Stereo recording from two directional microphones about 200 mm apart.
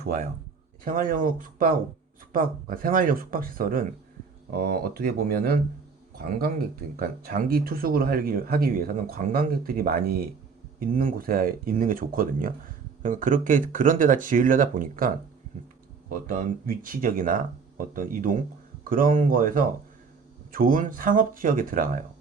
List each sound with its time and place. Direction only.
0.0 s a man's voice: 45° right (ahead or behind)